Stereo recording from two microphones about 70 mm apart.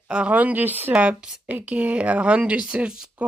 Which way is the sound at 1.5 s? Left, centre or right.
Right.